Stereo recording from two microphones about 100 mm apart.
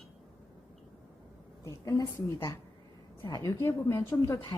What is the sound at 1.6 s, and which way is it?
A woman's voice, 35° left (ahead or behind).